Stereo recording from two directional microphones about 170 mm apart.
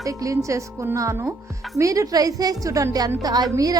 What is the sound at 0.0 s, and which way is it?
A woman's voice, 20° right (ahead or behind).